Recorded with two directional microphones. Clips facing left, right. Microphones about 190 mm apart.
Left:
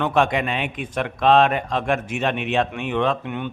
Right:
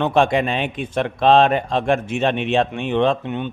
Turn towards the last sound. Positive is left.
turn(degrees=-25)  # may be behind; listen again after turning